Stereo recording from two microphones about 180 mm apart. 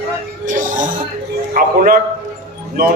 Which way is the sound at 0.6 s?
45° right (ahead or behind).